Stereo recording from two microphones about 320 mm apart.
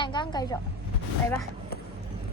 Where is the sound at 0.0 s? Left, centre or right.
Centre.